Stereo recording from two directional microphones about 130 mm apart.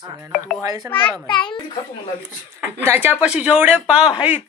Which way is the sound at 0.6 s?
25° right (ahead or behind).